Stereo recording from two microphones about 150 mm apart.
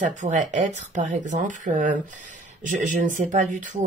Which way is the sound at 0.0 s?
55° right (ahead or behind).